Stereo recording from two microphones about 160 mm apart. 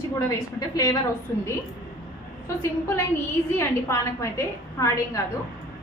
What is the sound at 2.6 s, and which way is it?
A woman's voice, 15° left (ahead or behind).